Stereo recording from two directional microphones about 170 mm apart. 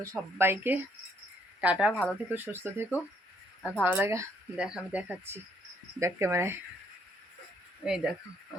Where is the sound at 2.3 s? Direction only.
10° right (ahead or behind).